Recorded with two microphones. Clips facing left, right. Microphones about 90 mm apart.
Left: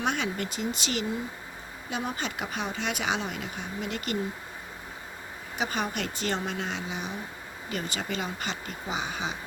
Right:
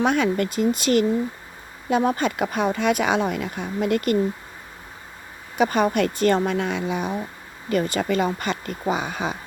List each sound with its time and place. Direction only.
0.0 s speech: 50° right (ahead or behind)
5.5 s speech: 50° right (ahead or behind)